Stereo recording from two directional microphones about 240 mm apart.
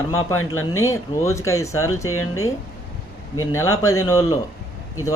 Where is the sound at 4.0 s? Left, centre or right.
Centre.